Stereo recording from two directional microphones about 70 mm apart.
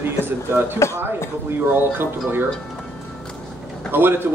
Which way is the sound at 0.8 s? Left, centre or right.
Left.